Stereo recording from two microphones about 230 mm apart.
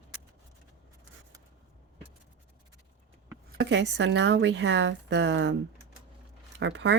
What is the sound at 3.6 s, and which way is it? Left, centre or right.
Speech, right.